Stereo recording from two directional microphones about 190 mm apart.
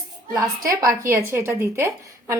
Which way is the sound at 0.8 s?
15° right (ahead or behind).